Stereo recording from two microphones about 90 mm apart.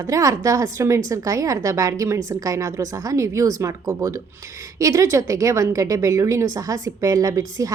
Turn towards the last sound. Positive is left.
turn(degrees=-40)  # may be behind; listen again after turning